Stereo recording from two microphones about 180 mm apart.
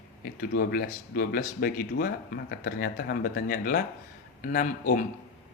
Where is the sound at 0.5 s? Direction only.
55° left (ahead or behind).